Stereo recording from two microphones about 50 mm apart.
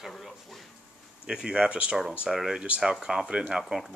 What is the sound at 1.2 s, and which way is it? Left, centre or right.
Speech, centre.